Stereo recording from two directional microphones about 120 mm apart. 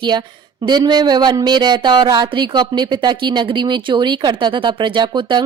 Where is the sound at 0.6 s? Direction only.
35° right (ahead or behind).